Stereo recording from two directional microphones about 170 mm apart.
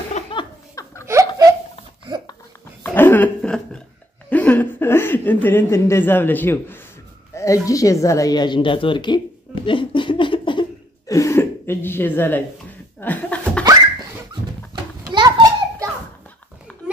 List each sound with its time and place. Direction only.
0.3 s laughter: 30° left (ahead or behind)
1.0 s laughter: 15° right (ahead or behind)
2.8 s a sound: 10° left (ahead or behind)
4.3 s chuckle: 10° left (ahead or behind)
7.3 s speech: 20° left (ahead or behind)
9.7 s a sound: 30° left (ahead or behind); by 12.4 s 10° left (ahead or behind)
13.0 s laughter: 10° left (ahead or behind)
14.7 s children playing: 25° right (ahead or behind)